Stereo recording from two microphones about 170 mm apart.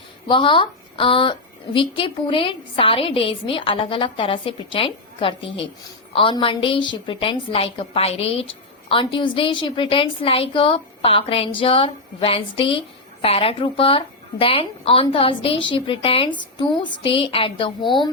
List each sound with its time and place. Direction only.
0.3 s a woman's voice: 30° left (ahead or behind)